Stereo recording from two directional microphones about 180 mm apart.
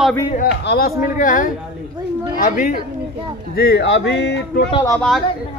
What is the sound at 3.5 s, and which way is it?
Speech, 65° left (ahead or behind).